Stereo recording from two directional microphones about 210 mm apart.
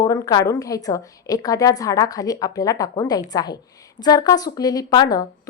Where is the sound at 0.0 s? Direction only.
15° left (ahead or behind).